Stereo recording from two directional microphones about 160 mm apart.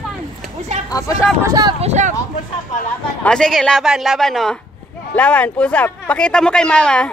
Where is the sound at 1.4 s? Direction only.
25° right (ahead or behind).